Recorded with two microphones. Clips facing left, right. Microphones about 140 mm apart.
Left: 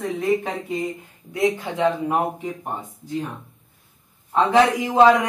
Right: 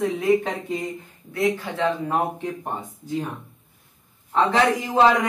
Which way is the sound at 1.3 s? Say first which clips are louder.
Left 2 dB; 20° left (ahead or behind).